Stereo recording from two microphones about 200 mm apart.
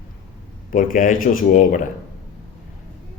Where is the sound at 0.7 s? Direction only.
40° left (ahead or behind).